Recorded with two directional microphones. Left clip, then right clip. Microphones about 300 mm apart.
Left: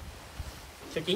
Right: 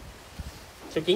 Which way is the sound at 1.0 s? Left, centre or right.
Centre.